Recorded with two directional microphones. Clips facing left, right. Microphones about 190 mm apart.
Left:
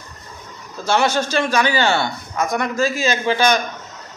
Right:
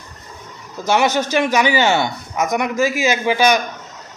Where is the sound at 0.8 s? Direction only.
15° right (ahead or behind).